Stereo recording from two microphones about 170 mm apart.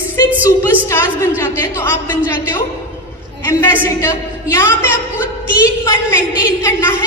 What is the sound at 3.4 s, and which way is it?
A woman's voice, 15° left (ahead or behind).